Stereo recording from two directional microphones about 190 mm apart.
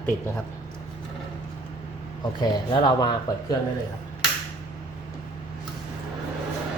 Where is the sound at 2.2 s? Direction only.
20° left (ahead or behind).